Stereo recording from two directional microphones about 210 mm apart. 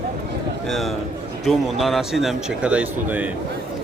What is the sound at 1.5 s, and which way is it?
A man's voice, centre (ahead or behind).